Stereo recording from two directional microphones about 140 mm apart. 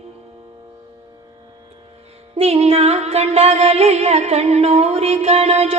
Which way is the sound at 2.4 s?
45° right (ahead or behind).